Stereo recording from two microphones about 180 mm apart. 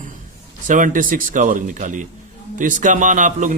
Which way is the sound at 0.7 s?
45° right (ahead or behind).